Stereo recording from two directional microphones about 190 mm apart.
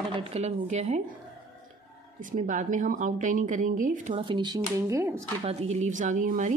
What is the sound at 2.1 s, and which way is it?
Speech, 45° right (ahead or behind).